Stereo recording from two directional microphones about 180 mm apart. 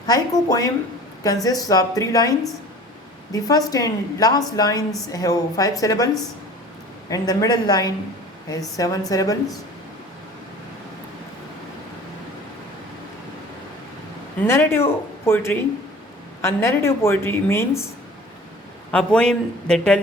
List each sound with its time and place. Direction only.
0.1 s a woman's voice: 20° left (ahead or behind)
7.1 s a woman's voice: 20° left (ahead or behind)
14.4 s a woman's voice: 15° left (ahead or behind)
18.9 s speech: 5° left (ahead or behind)